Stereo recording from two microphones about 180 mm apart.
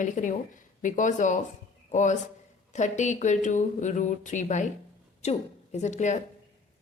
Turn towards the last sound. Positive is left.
turn(degrees=40)  # may be behind; listen again after turning